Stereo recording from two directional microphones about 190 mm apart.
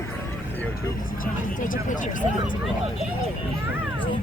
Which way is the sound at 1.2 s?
45° left (ahead or behind).